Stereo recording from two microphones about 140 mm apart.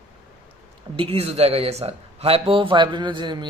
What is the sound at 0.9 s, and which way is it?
Speech, 45° right (ahead or behind).